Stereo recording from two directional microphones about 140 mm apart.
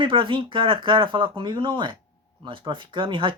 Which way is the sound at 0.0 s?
35° right (ahead or behind).